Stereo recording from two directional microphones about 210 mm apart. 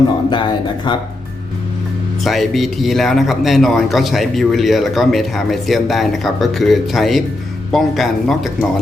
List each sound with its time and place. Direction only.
0.3 s speech: 20° left (ahead or behind)
2.2 s a man's voice: centre (ahead or behind)